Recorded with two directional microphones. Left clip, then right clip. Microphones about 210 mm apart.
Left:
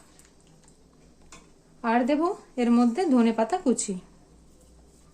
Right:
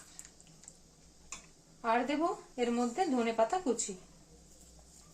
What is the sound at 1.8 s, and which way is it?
Speech, 50° left (ahead or behind).